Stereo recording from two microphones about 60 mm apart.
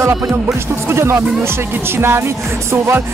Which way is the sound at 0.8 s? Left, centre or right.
Right.